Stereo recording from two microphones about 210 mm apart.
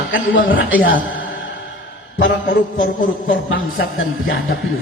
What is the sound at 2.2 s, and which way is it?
Mantra, 40° left (ahead or behind).